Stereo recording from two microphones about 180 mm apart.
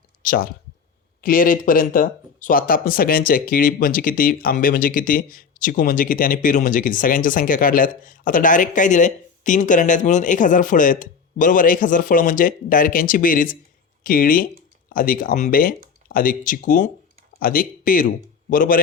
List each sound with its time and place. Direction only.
0.2 s speech: 50° left (ahead or behind)